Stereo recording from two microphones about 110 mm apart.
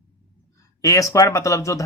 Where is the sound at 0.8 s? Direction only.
30° left (ahead or behind).